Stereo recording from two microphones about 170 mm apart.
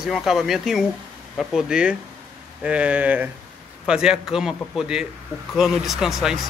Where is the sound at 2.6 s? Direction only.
5° right (ahead or behind).